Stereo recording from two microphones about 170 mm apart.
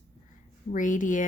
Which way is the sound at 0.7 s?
50° left (ahead or behind).